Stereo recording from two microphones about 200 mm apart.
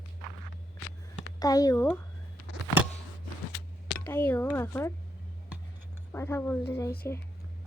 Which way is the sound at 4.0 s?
10° left (ahead or behind).